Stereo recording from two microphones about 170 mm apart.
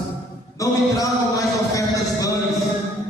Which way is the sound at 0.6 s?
20° left (ahead or behind).